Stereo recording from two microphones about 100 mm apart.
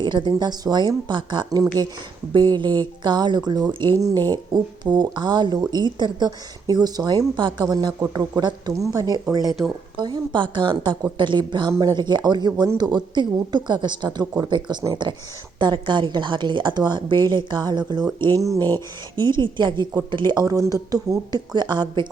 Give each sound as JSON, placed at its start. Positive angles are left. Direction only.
{"t": 0.0, "sound": "speech", "side_deg": -50}
{"t": 10.0, "sound": "speech", "side_deg": -50}
{"t": 18.3, "sound": "speech", "side_deg": -30}
{"t": 18.6, "sound": "speech", "side_deg": 20}
{"t": 19.2, "sound": "speech", "side_deg": -50}